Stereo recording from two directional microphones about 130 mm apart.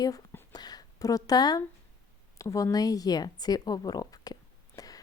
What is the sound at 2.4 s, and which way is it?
A woman's voice, 25° left (ahead or behind).